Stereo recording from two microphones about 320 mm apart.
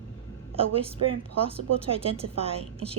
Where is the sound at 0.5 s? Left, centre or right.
Centre.